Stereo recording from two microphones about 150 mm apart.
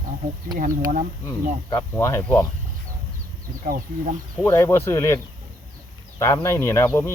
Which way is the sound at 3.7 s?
60° right (ahead or behind).